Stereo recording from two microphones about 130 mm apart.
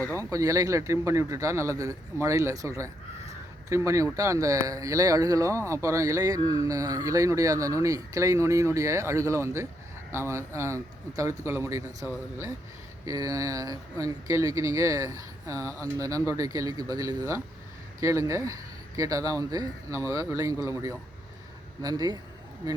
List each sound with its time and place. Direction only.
0.1 s speech: 25° right (ahead or behind)
21.8 s speech: 30° right (ahead or behind)